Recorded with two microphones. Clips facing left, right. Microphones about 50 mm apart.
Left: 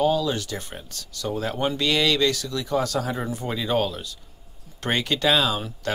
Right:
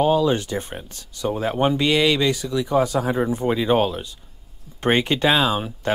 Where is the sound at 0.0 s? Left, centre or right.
Right.